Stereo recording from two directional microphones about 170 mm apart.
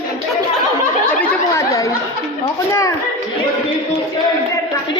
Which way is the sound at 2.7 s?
20° left (ahead or behind).